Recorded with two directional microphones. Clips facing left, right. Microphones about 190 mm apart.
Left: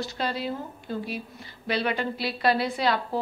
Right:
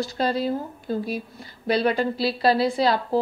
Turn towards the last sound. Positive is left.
turn(degrees=-35)  # may be behind; listen again after turning